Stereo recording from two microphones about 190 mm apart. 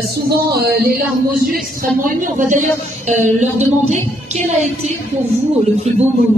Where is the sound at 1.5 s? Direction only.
45° right (ahead or behind).